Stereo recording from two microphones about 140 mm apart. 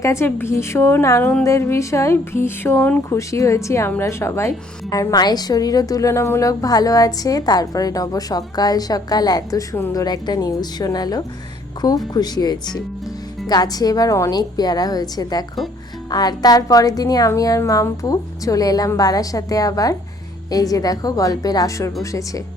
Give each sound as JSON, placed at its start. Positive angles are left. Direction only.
{"t": 0.0, "sound": "speech", "side_deg": 20}